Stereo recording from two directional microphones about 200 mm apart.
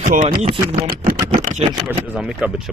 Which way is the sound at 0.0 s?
40° right (ahead or behind).